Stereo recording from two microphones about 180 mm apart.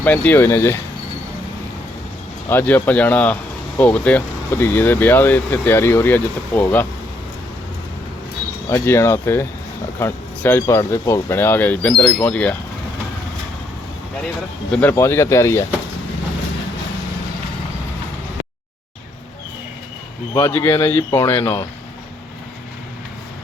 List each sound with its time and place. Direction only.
0.0 s speech: 10° left (ahead or behind)
2.5 s speech: 10° left (ahead or behind)
8.7 s speech: 15° left (ahead or behind)
14.8 s speech: 15° left (ahead or behind)
20.3 s speech: 15° left (ahead or behind)